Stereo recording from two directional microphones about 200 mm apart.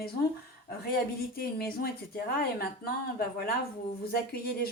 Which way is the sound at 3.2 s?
50° left (ahead or behind).